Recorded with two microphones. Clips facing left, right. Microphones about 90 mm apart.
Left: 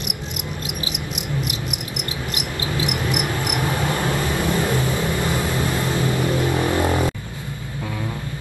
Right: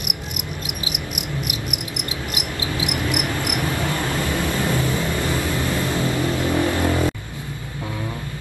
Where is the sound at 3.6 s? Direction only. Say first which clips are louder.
Left 3 dB; 20° left (ahead or behind).